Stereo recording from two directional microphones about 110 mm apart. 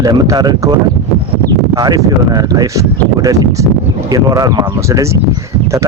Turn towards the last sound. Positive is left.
turn(degrees=-30)  # may be behind; listen again after turning